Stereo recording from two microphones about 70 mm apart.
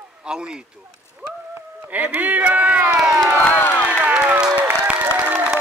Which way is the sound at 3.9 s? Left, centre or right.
Centre.